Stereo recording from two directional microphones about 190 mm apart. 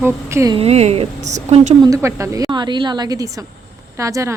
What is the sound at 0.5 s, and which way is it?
A woman's voice, 35° right (ahead or behind).